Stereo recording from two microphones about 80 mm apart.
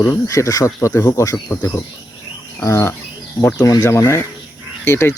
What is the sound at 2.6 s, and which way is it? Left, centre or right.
Speech, left.